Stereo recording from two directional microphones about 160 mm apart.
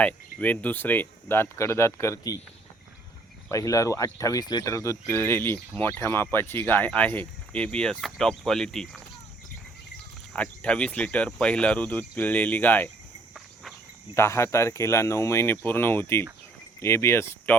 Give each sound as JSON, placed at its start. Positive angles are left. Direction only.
{"t": 0.3, "sound": "speech", "side_deg": 10}
{"t": 3.5, "sound": "speech", "side_deg": 20}
{"t": 10.3, "sound": "speech", "side_deg": 10}
{"t": 14.2, "sound": "speech", "side_deg": 15}